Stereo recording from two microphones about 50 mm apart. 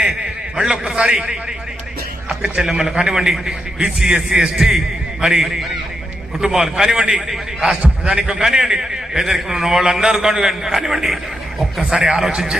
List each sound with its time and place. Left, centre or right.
0.7 s a man's voice: centre
2.4 s a man's voice: centre
3.8 s a man's voice: right